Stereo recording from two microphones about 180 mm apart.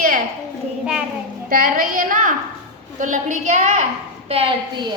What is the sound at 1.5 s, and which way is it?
A woman's voice, 50° right (ahead or behind).